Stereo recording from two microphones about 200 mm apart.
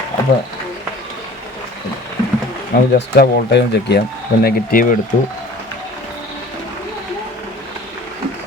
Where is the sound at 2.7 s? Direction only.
50° left (ahead or behind).